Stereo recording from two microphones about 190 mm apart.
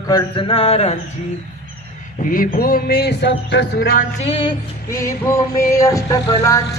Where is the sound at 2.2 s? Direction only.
50° left (ahead or behind).